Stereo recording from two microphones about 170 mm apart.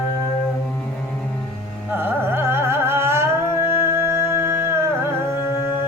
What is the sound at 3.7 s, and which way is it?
Music, 15° right (ahead or behind).